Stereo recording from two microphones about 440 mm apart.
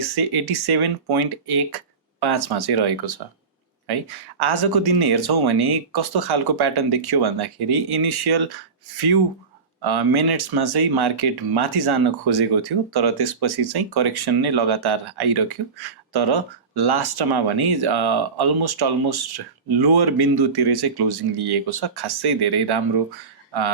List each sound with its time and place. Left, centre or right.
0.0 s speech: right